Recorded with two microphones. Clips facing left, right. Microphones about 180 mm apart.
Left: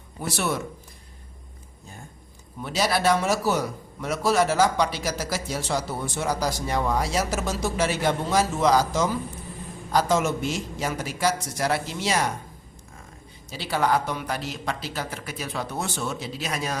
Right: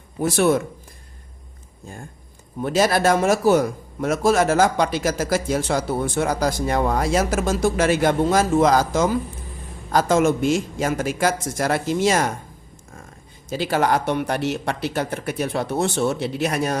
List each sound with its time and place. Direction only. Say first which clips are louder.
0.2 s a man's voice: right 9 dB; 50° right (ahead or behind)
2.6 s a man's voice: right 6 dB; 50° right (ahead or behind)
13.5 s a man's voice: right 7 dB; 45° right (ahead or behind)
13.8 s speech: even; 70° right (ahead or behind)